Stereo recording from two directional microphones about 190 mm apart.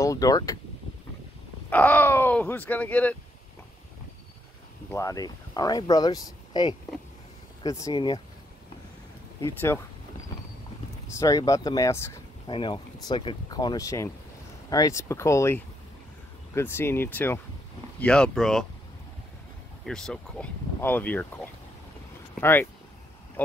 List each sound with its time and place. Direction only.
0.0 s speech: 20° left (ahead or behind)
1.7 s speech: 10° left (ahead or behind)
4.9 s speech: 20° left (ahead or behind)
9.4 s speech: 15° left (ahead or behind)
11.1 s speech: 20° left (ahead or behind)
12.5 s speech: 25° left (ahead or behind); by 18.7 s 5° left (ahead or behind)
19.8 s speech: 5° left (ahead or behind)
22.4 s speech: 10° left (ahead or behind)